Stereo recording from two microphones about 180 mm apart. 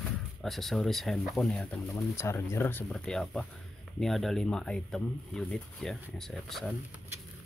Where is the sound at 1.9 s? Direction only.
15° left (ahead or behind).